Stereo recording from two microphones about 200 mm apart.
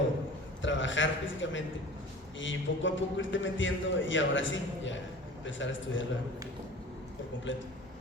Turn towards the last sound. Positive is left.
turn(degrees=70)  # may be behind; listen again after turning